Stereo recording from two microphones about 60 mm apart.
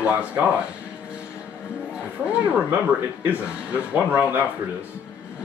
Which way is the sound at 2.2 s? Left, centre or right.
Centre.